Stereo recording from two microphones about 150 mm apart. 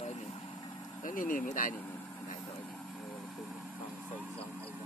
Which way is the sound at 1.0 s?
65° left (ahead or behind).